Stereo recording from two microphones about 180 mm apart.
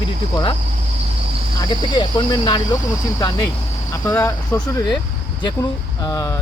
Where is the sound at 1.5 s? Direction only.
25° left (ahead or behind).